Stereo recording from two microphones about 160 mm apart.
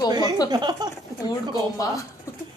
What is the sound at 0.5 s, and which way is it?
Speech, 25° right (ahead or behind).